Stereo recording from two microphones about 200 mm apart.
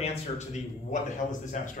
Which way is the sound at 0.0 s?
35° left (ahead or behind).